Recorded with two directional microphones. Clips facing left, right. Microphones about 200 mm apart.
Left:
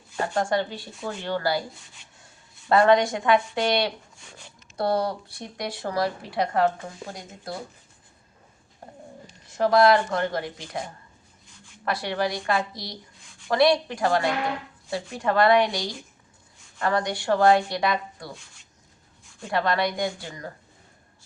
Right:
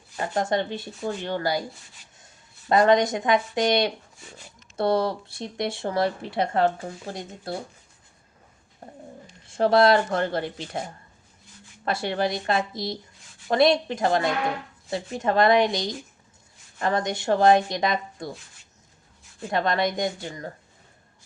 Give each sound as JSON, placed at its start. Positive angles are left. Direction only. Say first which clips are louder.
{"t": 0.3, "sound": "speech", "louder": "right 1 dB", "side_deg": -20}
{"t": 2.6, "sound": "speech", "louder": "even", "side_deg": -20}
{"t": 9.5, "sound": "speech", "louder": "even", "side_deg": -30}
{"t": 11.9, "sound": "speech", "louder": "right 1 dB", "side_deg": -25}
{"t": 19.5, "sound": "speech", "louder": "even", "side_deg": -20}